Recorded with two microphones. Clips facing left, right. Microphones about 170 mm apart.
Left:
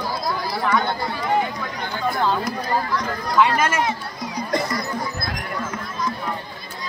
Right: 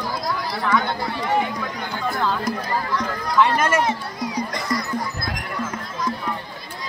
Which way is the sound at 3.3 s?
5° left (ahead or behind).